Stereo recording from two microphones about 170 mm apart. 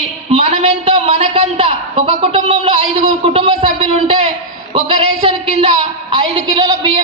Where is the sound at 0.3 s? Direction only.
35° right (ahead or behind).